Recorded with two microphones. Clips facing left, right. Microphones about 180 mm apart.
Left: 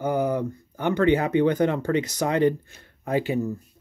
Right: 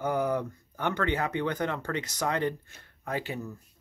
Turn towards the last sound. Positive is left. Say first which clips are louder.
# left 9 dB
turn(degrees=15)  # may be behind; listen again after turning